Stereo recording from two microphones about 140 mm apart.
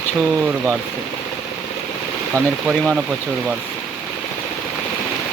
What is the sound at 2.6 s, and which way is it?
Speech, 5° right (ahead or behind).